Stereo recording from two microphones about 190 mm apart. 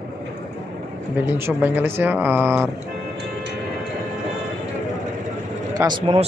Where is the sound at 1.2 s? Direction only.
10° right (ahead or behind).